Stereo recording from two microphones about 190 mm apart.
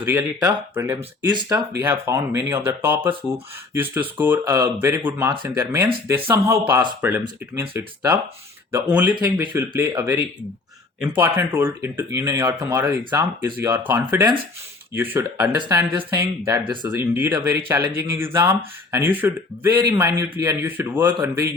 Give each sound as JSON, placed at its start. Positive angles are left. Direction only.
{"t": 0.0, "sound": "speech", "side_deg": -15}
{"t": 17.2, "sound": "speech", "side_deg": -10}